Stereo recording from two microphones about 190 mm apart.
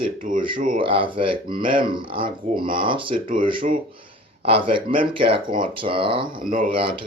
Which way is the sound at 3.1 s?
45° right (ahead or behind).